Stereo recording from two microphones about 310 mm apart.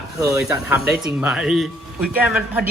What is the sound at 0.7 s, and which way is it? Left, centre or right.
Speech, centre.